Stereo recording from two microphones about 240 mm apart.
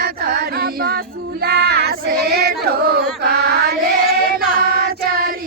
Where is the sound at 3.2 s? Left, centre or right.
Right.